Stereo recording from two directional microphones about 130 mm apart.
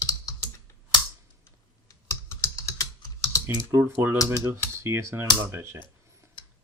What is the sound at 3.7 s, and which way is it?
Speech, 15° right (ahead or behind).